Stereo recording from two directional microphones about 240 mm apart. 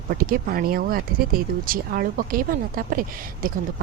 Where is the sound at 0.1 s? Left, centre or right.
Right.